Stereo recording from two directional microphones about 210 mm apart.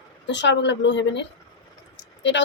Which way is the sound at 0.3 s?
55° left (ahead or behind).